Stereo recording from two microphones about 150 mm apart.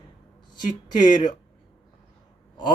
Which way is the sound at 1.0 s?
30° left (ahead or behind).